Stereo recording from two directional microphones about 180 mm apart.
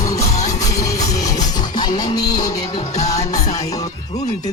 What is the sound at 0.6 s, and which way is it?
Music, 20° left (ahead or behind).